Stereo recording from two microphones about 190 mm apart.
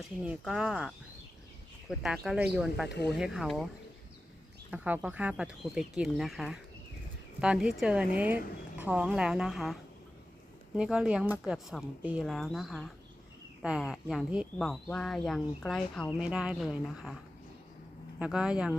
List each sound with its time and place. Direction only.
0.3 s speech: 5° right (ahead or behind)
4.7 s speech: 10° right (ahead or behind)
10.8 s speech: 5° right (ahead or behind)
18.2 s speech: 5° right (ahead or behind)